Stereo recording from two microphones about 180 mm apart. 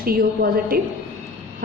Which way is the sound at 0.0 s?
55° right (ahead or behind).